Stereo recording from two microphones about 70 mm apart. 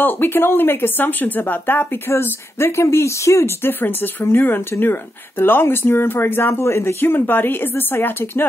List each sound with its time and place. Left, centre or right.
0.0 s speech: left